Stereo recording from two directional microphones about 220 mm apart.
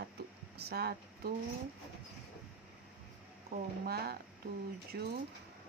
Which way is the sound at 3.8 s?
45° right (ahead or behind).